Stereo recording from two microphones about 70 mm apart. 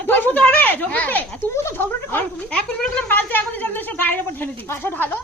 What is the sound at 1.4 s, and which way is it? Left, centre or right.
Speech, left.